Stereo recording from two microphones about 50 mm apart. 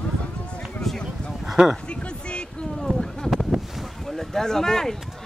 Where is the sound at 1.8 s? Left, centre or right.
Centre.